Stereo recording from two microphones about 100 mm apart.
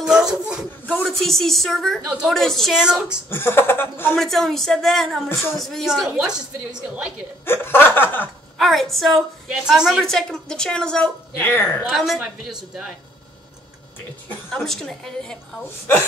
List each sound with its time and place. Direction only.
0.0 s a woman's voice: 5° right (ahead or behind)
3.3 s speech: 20° left (ahead or behind)
4.1 s a woman's voice: centre (ahead or behind)
7.4 s speech: 20° left (ahead or behind)
8.5 s a woman's voice: centre (ahead or behind)
10.0 s a woman's voice: 5° left (ahead or behind)
11.4 s speech: 20° left (ahead or behind)
11.9 s a woman's voice: centre (ahead or behind)
14.5 s a woman's voice: 5° left (ahead or behind)